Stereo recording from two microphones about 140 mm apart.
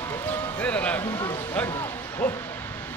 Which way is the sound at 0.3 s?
10° left (ahead or behind).